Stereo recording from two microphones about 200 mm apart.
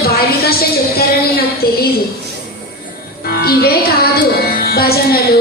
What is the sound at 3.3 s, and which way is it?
Music, 50° left (ahead or behind).